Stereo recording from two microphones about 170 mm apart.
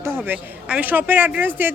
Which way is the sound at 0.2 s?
10° right (ahead or behind).